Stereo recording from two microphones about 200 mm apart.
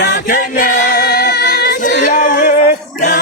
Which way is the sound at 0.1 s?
45° left (ahead or behind).